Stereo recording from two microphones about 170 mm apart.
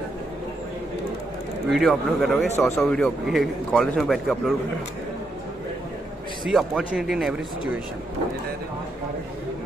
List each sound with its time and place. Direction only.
1.7 s a man's voice: centre (ahead or behind)
2.5 s speech: 15° left (ahead or behind)
3.3 s a man's voice: centre (ahead or behind)
6.5 s a man's voice: 5° right (ahead or behind)